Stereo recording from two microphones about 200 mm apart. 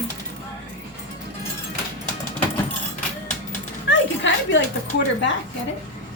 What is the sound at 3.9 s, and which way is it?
Speech, 70° left (ahead or behind).